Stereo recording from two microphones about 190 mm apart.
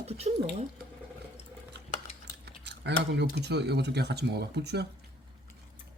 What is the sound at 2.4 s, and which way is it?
Speech, 65° right (ahead or behind).